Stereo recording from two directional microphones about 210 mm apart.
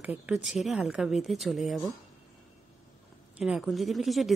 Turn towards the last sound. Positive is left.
turn(degrees=0)  # may be behind; listen again after turning